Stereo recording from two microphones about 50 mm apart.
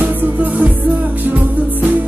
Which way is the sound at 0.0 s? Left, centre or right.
Right.